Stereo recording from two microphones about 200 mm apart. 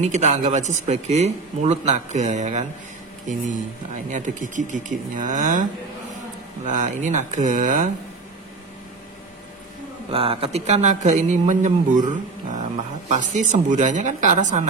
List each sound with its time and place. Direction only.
0.1 s a man's voice: 35° right (ahead or behind)
4.1 s a man's voice: 40° right (ahead or behind)
10.1 s a man's voice: 30° right (ahead or behind)